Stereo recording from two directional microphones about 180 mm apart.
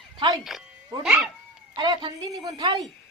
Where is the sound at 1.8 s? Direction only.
25° right (ahead or behind).